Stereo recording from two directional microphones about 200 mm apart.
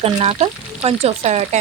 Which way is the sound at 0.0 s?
30° right (ahead or behind).